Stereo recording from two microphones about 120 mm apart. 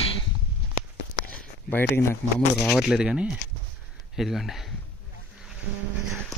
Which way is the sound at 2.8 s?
5° right (ahead or behind).